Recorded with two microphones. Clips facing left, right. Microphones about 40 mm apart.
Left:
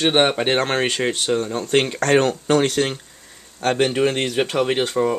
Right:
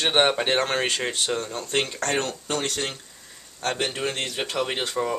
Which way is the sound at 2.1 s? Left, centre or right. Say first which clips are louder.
Left 10 dB; left.